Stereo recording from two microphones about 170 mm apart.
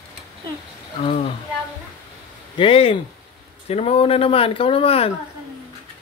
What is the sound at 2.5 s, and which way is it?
Speech, 35° left (ahead or behind).